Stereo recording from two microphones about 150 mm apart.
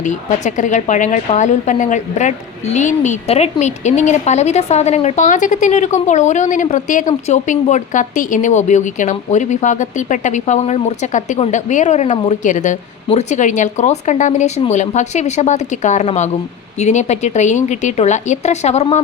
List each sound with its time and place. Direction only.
0.0 s a woman's voice: 55° left (ahead or behind)